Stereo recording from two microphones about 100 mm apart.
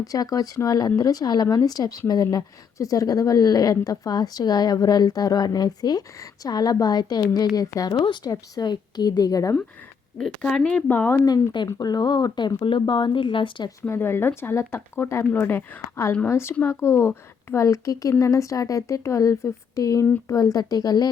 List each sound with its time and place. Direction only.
0.0 s speech: 35° left (ahead or behind)
7.9 s speech: 50° left (ahead or behind)
10.2 s speech: 5° left (ahead or behind)
11.3 s speech: 45° left (ahead or behind)
13.8 s speech: 25° left (ahead or behind); by 21.1 s 40° left (ahead or behind)